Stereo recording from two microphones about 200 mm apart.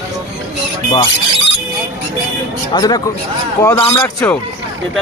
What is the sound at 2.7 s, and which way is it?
Speech, 20° left (ahead or behind).